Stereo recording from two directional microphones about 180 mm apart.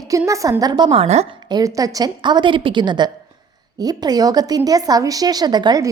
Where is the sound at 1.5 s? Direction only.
20° right (ahead or behind).